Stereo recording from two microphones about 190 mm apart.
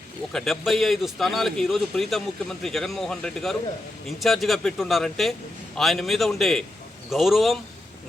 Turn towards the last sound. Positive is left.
turn(degrees=0)  # may be behind; listen again after turning